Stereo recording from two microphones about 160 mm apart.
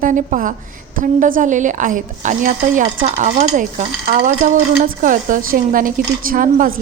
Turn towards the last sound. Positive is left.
turn(degrees=-60)  # may be behind; listen again after turning